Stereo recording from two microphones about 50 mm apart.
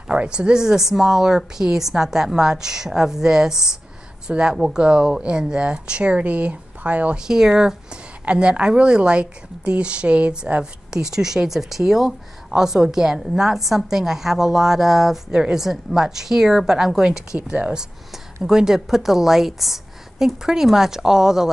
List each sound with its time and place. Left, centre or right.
0.1 s speech: centre
7.2 s speech: centre